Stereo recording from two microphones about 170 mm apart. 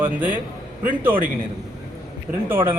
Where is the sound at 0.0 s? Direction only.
10° right (ahead or behind).